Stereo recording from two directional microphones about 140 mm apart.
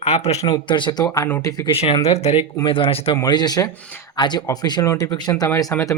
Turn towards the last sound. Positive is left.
turn(degrees=20)  # may be behind; listen again after turning